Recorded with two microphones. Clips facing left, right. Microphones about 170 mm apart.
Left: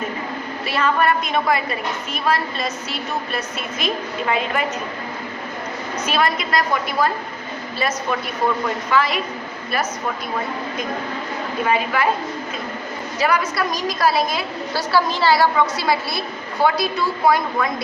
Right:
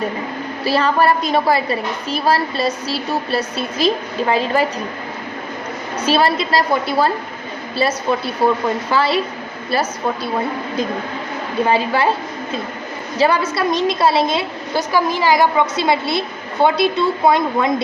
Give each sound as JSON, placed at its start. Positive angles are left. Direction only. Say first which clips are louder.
{"t": 0.6, "sound": "a woman's voice", "louder": "right 4 dB", "side_deg": -35}
{"t": 6.1, "sound": "a woman's voice", "louder": "right 5 dB", "side_deg": -30}
{"t": 8.4, "sound": "a woman's voice", "louder": "right 5 dB", "side_deg": -30}
{"t": 11.6, "sound": "a woman's voice", "louder": "right 4 dB", "side_deg": -30}
{"t": 13.1, "sound": "a woman's voice", "louder": "right 4 dB", "side_deg": -30}